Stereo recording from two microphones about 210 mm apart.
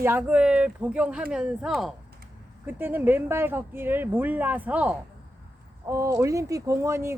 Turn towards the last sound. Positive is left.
turn(degrees=-10)  # may be behind; listen again after turning